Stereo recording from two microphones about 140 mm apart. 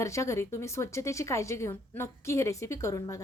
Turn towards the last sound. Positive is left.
turn(degrees=25)  # may be behind; listen again after turning